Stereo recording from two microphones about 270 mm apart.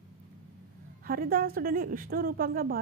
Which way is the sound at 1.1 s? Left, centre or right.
Right.